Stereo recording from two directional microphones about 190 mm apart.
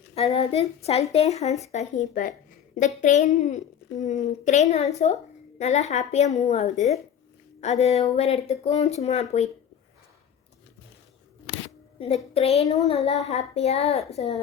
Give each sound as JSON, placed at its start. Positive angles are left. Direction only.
{"t": 0.1, "sound": "a woman's voice", "side_deg": 30}
{"t": 11.9, "sound": "speech", "side_deg": 30}